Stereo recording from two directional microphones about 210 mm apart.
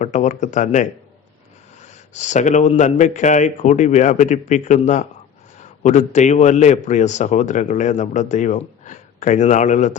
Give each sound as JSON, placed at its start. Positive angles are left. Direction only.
{"t": 0.0, "sound": "a man's voice", "side_deg": 35}